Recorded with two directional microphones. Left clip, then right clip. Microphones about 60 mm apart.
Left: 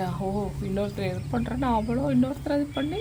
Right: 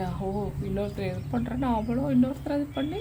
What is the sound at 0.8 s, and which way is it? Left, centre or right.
A woman's voice, centre.